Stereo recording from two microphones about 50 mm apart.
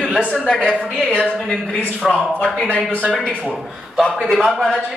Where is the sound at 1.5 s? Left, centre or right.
Left.